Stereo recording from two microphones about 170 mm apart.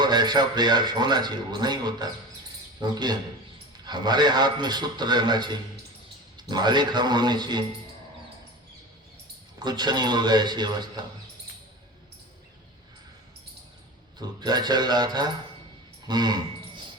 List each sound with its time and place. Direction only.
0.0 s speech: 25° right (ahead or behind)
9.6 s speech: 25° right (ahead or behind)
14.2 s speech: 25° right (ahead or behind)